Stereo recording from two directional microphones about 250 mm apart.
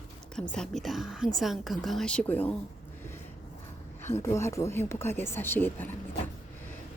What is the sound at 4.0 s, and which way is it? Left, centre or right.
Speech, centre.